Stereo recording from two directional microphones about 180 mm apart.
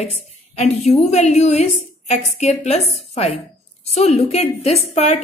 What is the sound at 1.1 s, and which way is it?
Speech, 40° left (ahead or behind).